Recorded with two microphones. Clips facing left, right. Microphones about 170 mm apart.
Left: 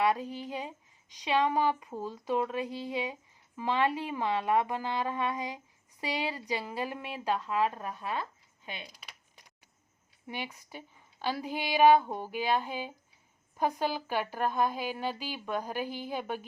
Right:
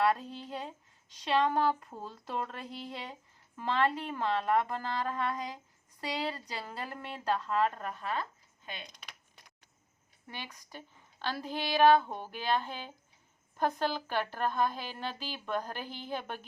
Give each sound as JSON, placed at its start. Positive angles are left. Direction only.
{"t": 0.0, "sound": "a woman's voice", "side_deg": 0}
{"t": 6.2, "sound": "speech", "side_deg": 10}
{"t": 8.6, "sound": "a sound", "side_deg": 10}
{"t": 10.2, "sound": "speech", "side_deg": 15}